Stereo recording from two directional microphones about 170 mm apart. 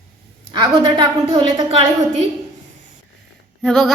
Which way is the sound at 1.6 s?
35° right (ahead or behind).